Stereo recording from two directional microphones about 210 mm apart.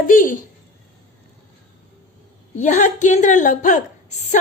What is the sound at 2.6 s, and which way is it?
A woman's voice, 35° left (ahead or behind).